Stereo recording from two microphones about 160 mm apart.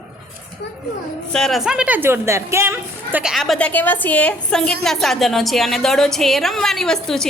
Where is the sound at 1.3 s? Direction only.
Centre (ahead or behind).